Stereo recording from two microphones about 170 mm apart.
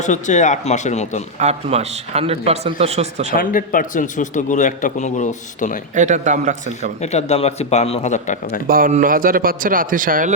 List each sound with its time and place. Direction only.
0.0 s a man's voice: 45° left (ahead or behind)
1.4 s a man's voice: 40° right (ahead or behind)
3.3 s a man's voice: 55° left (ahead or behind)
5.9 s speech: 45° right (ahead or behind)
7.0 s a man's voice: 40° left (ahead or behind)
8.6 s speech: 60° right (ahead or behind)